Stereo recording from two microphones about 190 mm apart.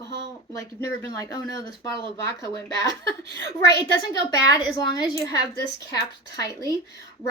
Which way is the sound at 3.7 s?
65° left (ahead or behind).